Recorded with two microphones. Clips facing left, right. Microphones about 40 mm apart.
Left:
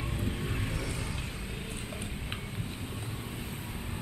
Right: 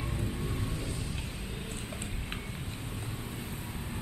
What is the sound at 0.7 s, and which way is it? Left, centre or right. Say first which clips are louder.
Vehicle: left 2 dB; left.